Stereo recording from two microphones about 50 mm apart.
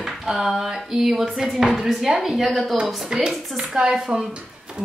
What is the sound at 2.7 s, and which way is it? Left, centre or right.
A woman's voice, centre.